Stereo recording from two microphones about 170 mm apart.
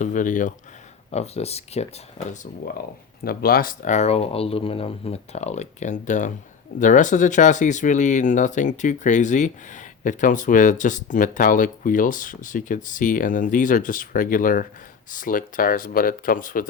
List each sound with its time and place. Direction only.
0.0 s speech: 50° left (ahead or behind)
1.1 s speech: 40° left (ahead or behind)
3.2 s speech: 60° left (ahead or behind)